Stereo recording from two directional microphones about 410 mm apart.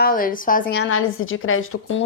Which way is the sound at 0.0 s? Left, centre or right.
Centre.